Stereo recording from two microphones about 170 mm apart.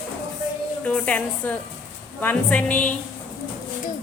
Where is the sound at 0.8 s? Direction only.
10° left (ahead or behind).